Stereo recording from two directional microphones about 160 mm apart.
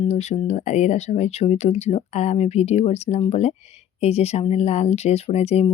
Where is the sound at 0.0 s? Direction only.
45° left (ahead or behind).